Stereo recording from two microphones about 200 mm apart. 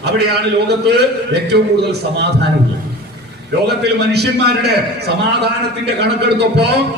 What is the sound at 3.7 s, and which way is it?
A man's voice, 55° right (ahead or behind).